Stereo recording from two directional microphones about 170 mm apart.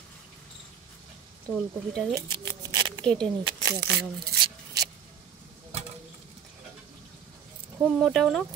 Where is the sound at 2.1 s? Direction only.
25° right (ahead or behind).